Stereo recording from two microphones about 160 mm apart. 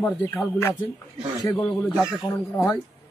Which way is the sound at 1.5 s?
5° left (ahead or behind).